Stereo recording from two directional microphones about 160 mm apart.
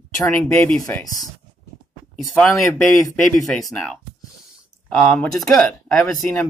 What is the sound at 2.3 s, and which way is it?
Speech, 5° left (ahead or behind).